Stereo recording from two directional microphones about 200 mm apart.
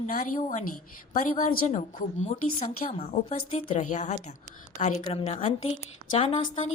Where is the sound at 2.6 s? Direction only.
35° left (ahead or behind).